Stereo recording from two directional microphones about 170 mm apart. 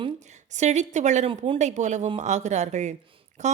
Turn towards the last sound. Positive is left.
turn(degrees=-45)  # may be behind; listen again after turning